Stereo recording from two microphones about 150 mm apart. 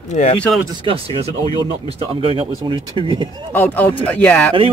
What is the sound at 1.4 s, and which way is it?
Speech, 30° left (ahead or behind).